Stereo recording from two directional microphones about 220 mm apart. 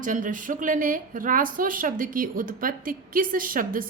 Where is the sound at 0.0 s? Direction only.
35° right (ahead or behind).